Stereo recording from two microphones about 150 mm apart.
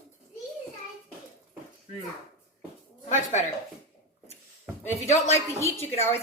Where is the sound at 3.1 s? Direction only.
55° left (ahead or behind).